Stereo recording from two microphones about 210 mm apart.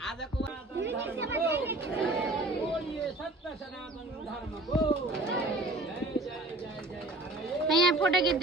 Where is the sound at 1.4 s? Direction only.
10° right (ahead or behind).